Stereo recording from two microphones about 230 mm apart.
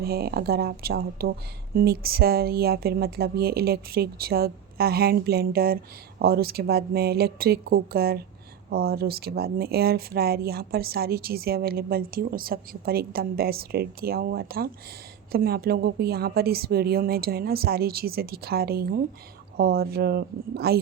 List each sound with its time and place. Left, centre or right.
0.0 s speech: right